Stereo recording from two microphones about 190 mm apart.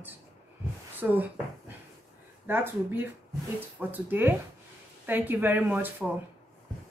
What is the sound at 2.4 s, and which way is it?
A woman's voice, 10° right (ahead or behind).